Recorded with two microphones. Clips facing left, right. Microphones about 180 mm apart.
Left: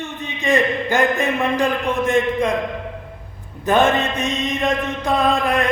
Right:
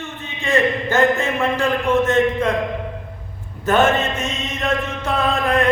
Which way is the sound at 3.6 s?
15° left (ahead or behind).